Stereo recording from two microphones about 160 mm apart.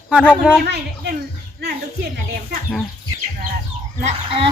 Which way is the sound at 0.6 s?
90° right.